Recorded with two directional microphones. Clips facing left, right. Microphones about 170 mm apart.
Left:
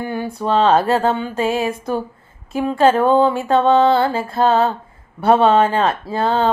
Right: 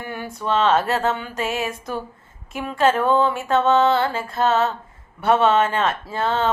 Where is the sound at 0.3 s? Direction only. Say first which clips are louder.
Left 4 dB; 35° left (ahead or behind).